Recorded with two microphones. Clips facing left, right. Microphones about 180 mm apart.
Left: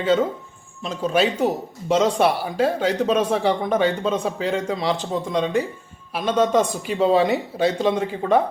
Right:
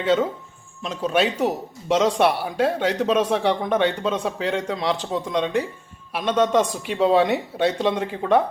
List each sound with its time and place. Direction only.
0.0 s speech: centre (ahead or behind)